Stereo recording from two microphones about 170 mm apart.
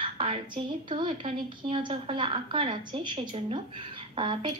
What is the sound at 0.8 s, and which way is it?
A woman's voice, 30° right (ahead or behind).